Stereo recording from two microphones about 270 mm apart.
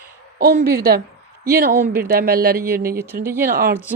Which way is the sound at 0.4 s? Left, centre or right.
Right.